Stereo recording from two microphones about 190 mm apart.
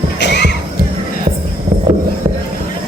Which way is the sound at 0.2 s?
65° left (ahead or behind).